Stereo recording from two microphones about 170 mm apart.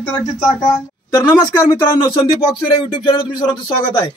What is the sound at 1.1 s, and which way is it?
A man's voice, 20° left (ahead or behind).